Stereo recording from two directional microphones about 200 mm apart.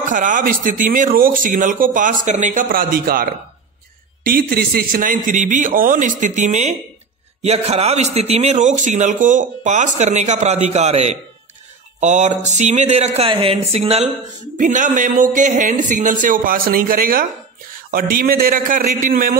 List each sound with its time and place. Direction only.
0.1 s a man's voice: 40° right (ahead or behind)
14.6 s a man's voice: 40° right (ahead or behind)